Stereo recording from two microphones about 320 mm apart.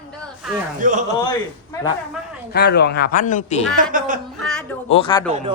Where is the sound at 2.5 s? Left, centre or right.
Left.